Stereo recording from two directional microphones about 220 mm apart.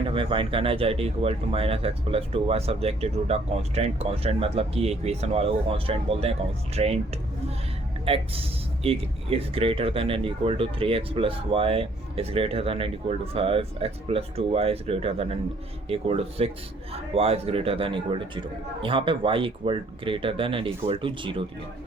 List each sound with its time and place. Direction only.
0.1 s speech: 25° right (ahead or behind)